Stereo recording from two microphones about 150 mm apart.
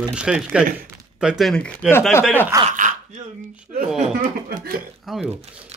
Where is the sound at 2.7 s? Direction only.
55° right (ahead or behind).